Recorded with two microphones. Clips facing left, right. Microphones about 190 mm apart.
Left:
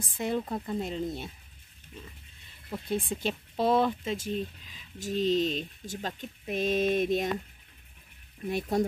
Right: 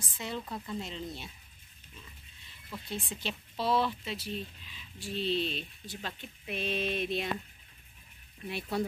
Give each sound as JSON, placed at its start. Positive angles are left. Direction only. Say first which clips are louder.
{"t": 0.1, "sound": "speech", "louder": "left 8 dB", "side_deg": 50}
{"t": 2.7, "sound": "speech", "louder": "left 8 dB", "side_deg": 55}
{"t": 8.5, "sound": "speech", "louder": "left 6 dB", "side_deg": 45}